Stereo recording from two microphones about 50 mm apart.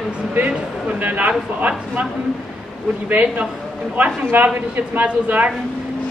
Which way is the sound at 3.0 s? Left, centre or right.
Right.